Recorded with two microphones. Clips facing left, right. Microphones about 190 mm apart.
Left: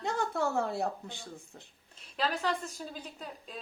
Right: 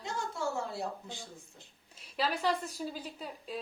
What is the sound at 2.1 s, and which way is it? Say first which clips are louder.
A woman's voice: right 1 dB; 10° right (ahead or behind).